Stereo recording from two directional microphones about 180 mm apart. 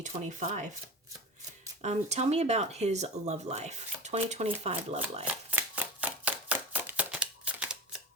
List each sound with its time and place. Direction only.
0.0 s speech: 40° right (ahead or behind)
1.8 s speech: 40° right (ahead or behind)
5.2 s chopping: 10° right (ahead or behind)